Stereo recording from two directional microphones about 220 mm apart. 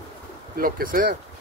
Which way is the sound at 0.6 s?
40° right (ahead or behind).